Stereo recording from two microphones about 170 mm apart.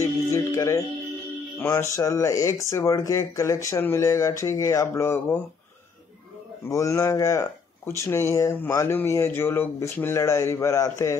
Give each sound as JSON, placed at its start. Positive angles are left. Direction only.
{"t": 0.0, "sound": "music", "side_deg": 20}
{"t": 1.6, "sound": "speech", "side_deg": 15}
{"t": 6.7, "sound": "speech", "side_deg": 15}